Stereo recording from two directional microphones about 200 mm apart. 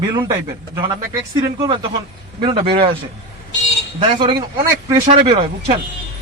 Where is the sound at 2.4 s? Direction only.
25° right (ahead or behind).